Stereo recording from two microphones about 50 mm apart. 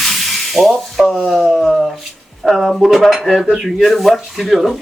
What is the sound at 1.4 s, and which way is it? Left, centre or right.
Speech, centre.